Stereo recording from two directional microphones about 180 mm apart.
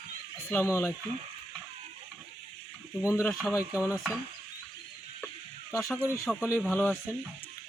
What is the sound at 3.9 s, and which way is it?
Stir, 10° right (ahead or behind).